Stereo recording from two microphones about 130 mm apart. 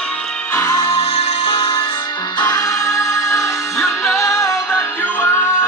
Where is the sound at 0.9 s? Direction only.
50° left (ahead or behind).